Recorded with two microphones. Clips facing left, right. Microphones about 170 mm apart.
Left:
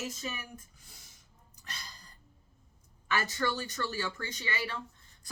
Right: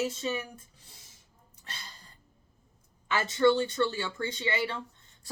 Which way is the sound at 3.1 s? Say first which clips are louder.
Right 8 dB; 25° right (ahead or behind).